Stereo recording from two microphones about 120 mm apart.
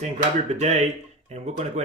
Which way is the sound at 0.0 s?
75° right (ahead or behind).